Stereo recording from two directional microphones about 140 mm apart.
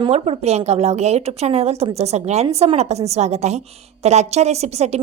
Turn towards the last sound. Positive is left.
turn(degrees=-50)  # may be behind; listen again after turning